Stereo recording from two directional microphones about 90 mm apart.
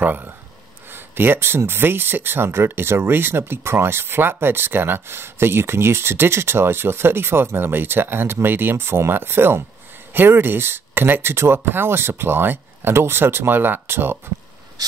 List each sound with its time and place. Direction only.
0.0 s speech: 20° right (ahead or behind)
14.8 s ratchet: 45° right (ahead or behind)